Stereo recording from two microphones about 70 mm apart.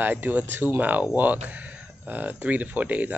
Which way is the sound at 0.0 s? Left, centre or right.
Right.